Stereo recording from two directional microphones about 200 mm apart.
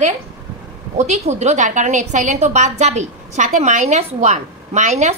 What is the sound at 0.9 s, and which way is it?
A woman's voice, 35° right (ahead or behind).